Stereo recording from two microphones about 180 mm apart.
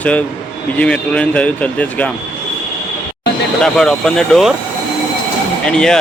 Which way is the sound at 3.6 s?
5° left (ahead or behind).